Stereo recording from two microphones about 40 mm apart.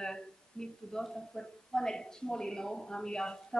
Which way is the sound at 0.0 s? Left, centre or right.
Centre.